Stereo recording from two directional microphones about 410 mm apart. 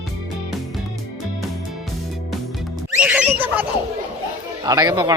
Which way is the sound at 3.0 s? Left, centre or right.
Centre.